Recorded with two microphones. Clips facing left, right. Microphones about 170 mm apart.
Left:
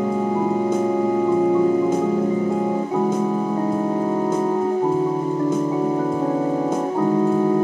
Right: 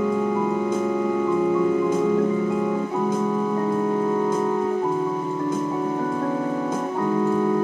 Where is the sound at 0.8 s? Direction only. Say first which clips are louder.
Left 3 dB; 30° left (ahead or behind).